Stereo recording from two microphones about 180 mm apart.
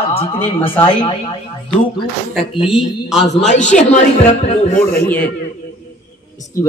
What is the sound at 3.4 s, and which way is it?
A man's voice, 40° left (ahead or behind).